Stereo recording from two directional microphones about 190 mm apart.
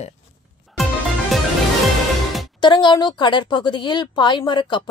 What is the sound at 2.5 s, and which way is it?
A woman's voice, 25° left (ahead or behind).